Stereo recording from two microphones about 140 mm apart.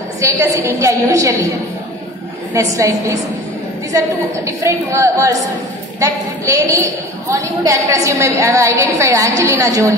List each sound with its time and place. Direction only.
0.2 s a woman's voice: 25° right (ahead or behind)
2.5 s a woman's voice: 25° right (ahead or behind)
4.5 s a woman's voice: 20° right (ahead or behind)